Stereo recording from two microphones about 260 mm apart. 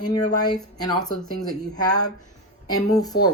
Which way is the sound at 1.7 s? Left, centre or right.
Centre.